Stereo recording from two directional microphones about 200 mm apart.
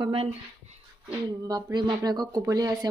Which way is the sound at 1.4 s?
20° right (ahead or behind).